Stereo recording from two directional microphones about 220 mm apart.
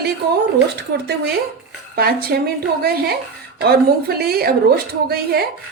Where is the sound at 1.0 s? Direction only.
45° right (ahead or behind).